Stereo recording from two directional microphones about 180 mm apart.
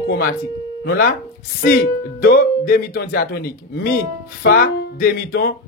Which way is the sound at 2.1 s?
60° left (ahead or behind).